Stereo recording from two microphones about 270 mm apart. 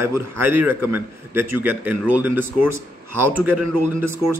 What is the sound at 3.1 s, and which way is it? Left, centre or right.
Speech, right.